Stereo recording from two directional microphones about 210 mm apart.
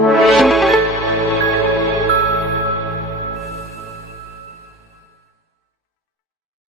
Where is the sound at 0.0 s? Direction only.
Centre (ahead or behind).